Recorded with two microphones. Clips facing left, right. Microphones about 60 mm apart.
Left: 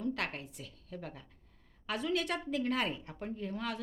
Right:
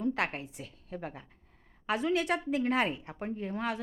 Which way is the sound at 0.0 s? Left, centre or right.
Right.